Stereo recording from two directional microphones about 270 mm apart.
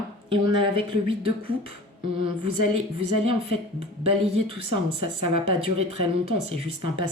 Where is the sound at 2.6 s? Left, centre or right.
Right.